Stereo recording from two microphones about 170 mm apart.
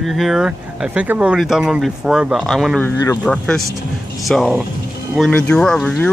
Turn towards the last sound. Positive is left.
turn(degrees=5)  # may be behind; listen again after turning